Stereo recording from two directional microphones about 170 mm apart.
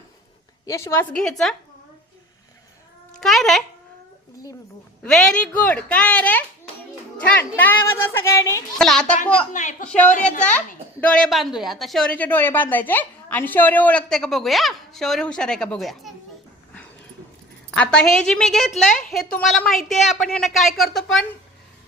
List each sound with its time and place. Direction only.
0.6 s a woman's voice: 15° left (ahead or behind)
1.1 s speech: 5° left (ahead or behind)
3.1 s speech: centre (ahead or behind)
5.0 s speech: 5° left (ahead or behind)
8.8 s speech: 5° left (ahead or behind)
9.5 s speech: 45° left (ahead or behind)
11.0 s speech: 5° left (ahead or behind)
17.7 s speech: 5° left (ahead or behind)